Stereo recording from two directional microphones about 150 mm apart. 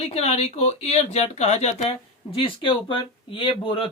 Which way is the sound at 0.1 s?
45° left (ahead or behind).